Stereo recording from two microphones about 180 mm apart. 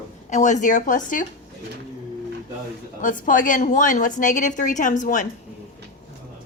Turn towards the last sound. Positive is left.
turn(degrees=45)  # may be behind; listen again after turning